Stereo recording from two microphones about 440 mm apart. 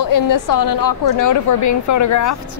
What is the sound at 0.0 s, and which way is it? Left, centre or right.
A woman's voice, left.